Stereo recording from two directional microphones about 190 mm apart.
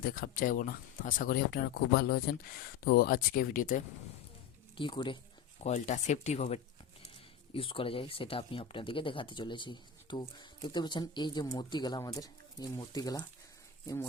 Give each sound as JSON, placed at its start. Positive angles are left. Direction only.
{"t": 0.0, "sound": "speech", "side_deg": 50}
{"t": 4.8, "sound": "speech", "side_deg": 25}
{"t": 5.6, "sound": "speech", "side_deg": 40}